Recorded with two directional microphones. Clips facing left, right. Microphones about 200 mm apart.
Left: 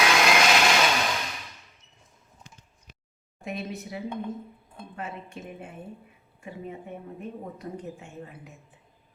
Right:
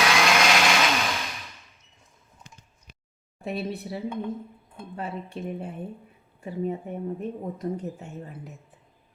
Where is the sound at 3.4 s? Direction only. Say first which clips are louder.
Right 4 dB; 35° right (ahead or behind).